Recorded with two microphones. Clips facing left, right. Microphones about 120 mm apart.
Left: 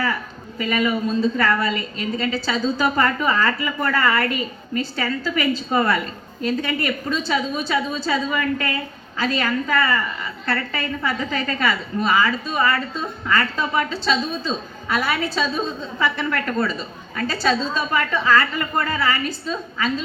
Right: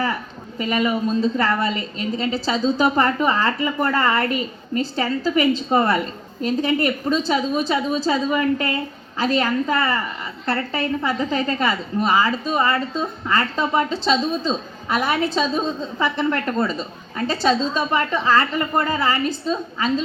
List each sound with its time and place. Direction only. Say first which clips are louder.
0.6 s a man's voice: right 1 dB; 30° right (ahead or behind)